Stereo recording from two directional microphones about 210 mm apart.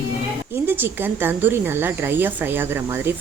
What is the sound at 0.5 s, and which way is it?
A woman's voice, 10° right (ahead or behind).